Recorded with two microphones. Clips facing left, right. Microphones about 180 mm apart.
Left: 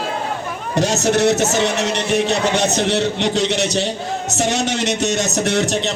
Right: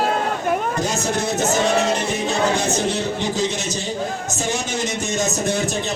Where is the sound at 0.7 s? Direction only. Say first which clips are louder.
Left 5 dB; 75° left (ahead or behind).